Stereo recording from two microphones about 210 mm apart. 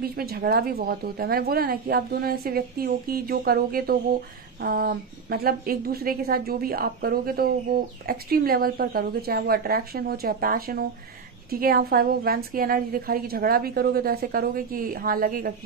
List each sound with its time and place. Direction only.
0.0 s a woman's voice: 45° right (ahead or behind)